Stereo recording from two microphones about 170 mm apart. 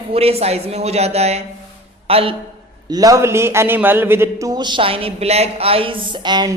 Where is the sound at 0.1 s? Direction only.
35° right (ahead or behind).